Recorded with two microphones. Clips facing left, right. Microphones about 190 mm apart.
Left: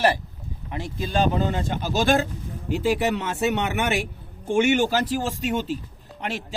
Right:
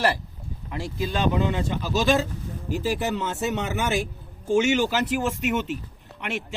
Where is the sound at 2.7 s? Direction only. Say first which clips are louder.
Left 3 dB; 65° left (ahead or behind).